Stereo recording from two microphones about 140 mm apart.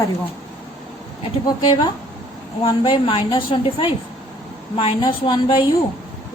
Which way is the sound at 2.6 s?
40° left (ahead or behind).